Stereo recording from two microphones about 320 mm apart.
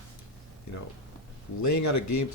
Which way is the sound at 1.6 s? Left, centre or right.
Left.